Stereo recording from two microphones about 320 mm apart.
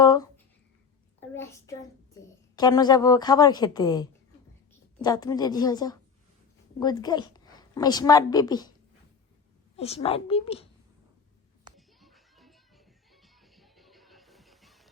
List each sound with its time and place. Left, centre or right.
0.0 s a sound: centre
1.3 s a child's voice: centre
9.7 s a woman's voice: centre
11.9 s music: centre